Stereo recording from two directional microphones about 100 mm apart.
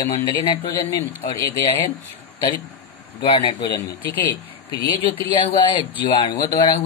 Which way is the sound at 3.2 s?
55° left (ahead or behind).